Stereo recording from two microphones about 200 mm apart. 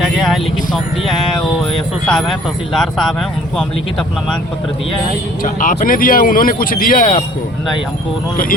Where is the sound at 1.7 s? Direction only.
Centre (ahead or behind).